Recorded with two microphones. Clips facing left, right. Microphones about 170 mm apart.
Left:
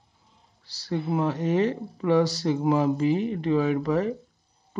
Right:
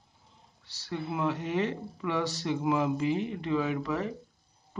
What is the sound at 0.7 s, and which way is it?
Speech, 35° left (ahead or behind).